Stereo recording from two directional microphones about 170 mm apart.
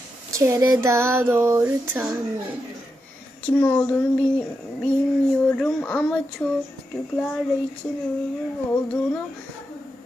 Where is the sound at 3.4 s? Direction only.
10° left (ahead or behind).